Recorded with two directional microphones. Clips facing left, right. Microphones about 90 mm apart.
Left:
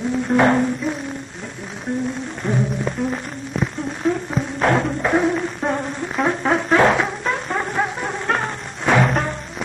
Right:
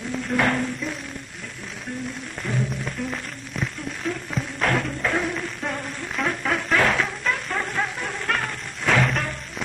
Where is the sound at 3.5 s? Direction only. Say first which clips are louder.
Left 6 dB; 30° left (ahead or behind).